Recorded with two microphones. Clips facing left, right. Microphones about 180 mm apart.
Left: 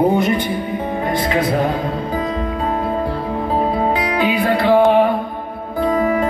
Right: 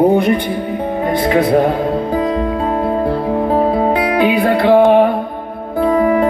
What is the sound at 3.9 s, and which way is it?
Music, 60° right (ahead or behind).